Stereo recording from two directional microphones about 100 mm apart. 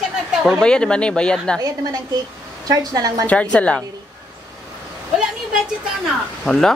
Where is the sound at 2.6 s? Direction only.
40° right (ahead or behind).